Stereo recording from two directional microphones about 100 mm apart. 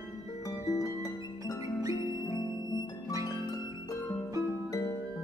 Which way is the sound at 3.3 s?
40° left (ahead or behind).